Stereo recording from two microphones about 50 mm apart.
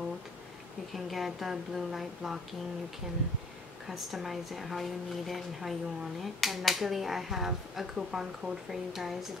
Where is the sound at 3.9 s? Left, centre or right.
Centre.